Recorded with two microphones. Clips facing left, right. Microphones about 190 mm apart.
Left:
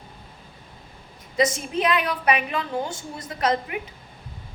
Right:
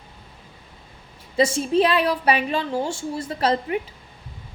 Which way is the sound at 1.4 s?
30° right (ahead or behind).